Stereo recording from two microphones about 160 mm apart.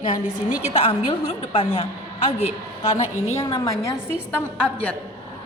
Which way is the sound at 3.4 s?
25° left (ahead or behind).